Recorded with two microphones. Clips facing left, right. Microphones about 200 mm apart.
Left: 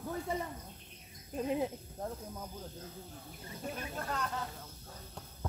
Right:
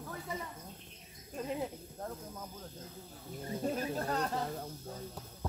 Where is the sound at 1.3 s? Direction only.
20° left (ahead or behind).